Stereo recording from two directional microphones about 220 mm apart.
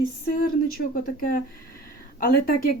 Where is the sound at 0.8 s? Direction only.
50° left (ahead or behind).